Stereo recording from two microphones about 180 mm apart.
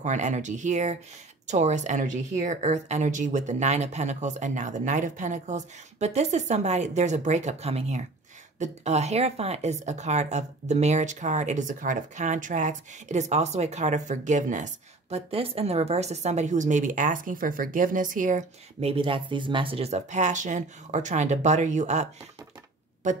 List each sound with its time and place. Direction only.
0.0 s speech: 40° right (ahead or behind)